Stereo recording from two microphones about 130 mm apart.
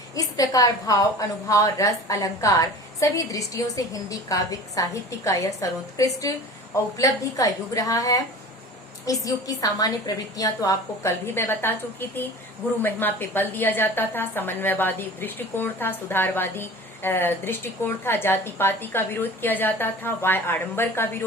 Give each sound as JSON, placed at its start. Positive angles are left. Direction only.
{"t": 0.2, "sound": "a woman's voice", "side_deg": 25}
{"t": 9.2, "sound": "a woman's voice", "side_deg": 25}